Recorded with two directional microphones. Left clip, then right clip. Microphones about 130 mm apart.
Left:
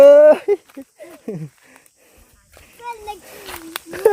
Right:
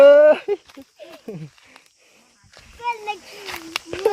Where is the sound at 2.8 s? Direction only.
85° left.